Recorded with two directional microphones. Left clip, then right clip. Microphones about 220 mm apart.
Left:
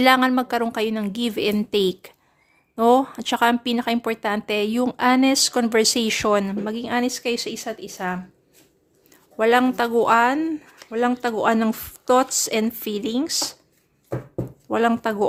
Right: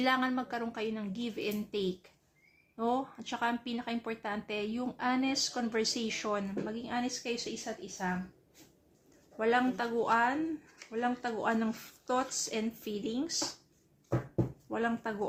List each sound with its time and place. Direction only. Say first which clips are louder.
0.0 s a woman's voice: left 14 dB; 45° left (ahead or behind)
9.4 s a woman's voice: left 12 dB; 50° left (ahead or behind)
14.7 s a woman's voice: left 16 dB; 50° left (ahead or behind)